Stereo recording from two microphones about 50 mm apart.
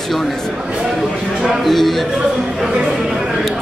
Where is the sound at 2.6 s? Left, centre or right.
Centre.